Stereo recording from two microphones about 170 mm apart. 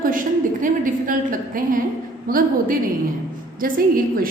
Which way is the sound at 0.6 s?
50° right (ahead or behind).